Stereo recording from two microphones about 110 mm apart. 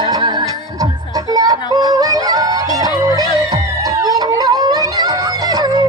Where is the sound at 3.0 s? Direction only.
35° right (ahead or behind).